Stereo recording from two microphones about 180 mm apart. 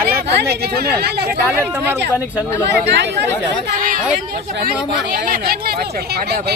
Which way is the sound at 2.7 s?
70° right (ahead or behind).